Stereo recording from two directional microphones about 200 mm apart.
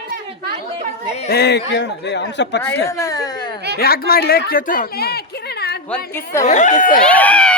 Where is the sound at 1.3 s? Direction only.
55° left (ahead or behind).